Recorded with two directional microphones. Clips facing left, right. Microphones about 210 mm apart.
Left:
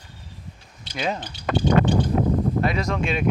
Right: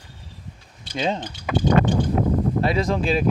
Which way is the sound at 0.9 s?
25° right (ahead or behind).